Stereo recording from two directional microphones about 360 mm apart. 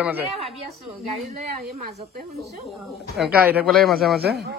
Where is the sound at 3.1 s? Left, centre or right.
Centre.